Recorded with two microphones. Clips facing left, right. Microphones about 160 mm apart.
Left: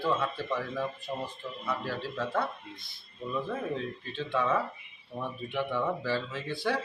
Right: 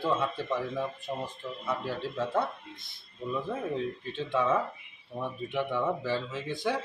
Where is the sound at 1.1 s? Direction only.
5° right (ahead or behind).